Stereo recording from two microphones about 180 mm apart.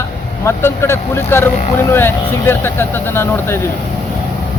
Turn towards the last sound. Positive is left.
turn(degrees=15)  # may be behind; listen again after turning